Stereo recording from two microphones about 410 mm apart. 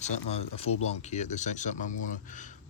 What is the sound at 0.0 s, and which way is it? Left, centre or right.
Speech, centre.